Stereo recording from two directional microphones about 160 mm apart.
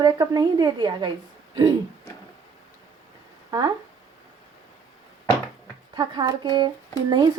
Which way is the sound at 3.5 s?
25° right (ahead or behind).